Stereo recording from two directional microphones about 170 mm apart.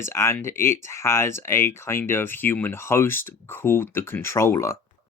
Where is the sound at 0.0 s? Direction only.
15° left (ahead or behind).